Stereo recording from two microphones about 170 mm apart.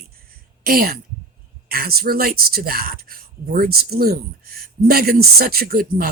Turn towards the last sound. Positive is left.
turn(degrees=-60)  # may be behind; listen again after turning